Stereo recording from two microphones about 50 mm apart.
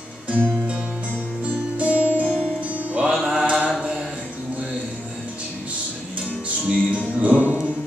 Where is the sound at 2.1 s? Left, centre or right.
Left.